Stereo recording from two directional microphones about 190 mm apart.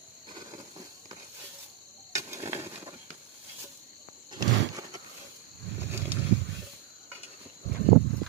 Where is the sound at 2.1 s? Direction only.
15° right (ahead or behind).